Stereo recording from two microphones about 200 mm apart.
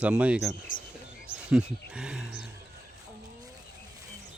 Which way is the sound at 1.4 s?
5° right (ahead or behind).